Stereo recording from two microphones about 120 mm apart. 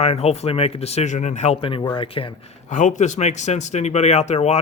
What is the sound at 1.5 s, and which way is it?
Speech, 50° left (ahead or behind).